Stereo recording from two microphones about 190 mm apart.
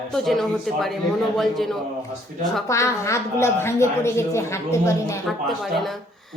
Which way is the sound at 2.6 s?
15° left (ahead or behind).